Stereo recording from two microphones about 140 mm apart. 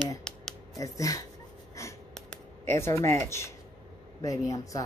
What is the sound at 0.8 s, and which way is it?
Speech, 25° left (ahead or behind).